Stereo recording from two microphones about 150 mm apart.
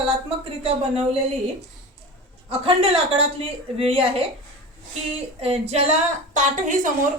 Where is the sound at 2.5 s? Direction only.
40° right (ahead or behind).